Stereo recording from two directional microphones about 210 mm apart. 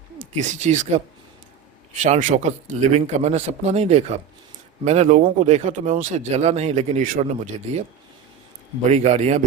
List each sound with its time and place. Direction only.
0.2 s speech: 35° right (ahead or behind)
8.9 s speech: 30° right (ahead or behind)